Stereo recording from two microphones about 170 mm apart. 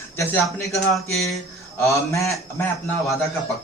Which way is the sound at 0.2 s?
10° left (ahead or behind).